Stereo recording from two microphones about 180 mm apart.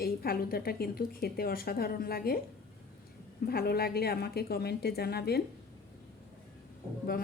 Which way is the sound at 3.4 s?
60° left (ahead or behind).